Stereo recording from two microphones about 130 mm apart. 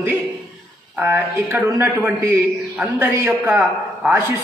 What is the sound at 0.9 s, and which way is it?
A man's voice, 15° right (ahead or behind).